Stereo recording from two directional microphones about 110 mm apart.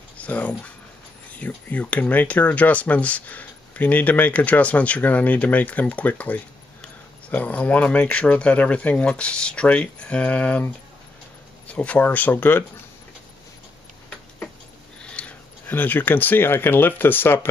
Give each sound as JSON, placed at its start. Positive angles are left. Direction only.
{"t": 0.2, "sound": "speech", "side_deg": 15}
{"t": 15.0, "sound": "speech", "side_deg": 10}